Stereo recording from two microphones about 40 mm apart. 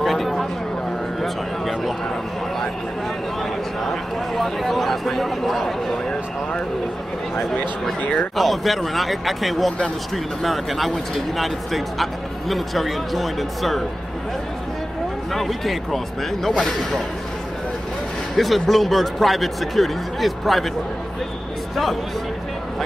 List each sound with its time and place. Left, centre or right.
0.0 s a sound: centre
3.8 s speech: centre
8.0 s speech: left
8.4 s speech: centre
15.3 s speech: centre
18.3 s speech: centre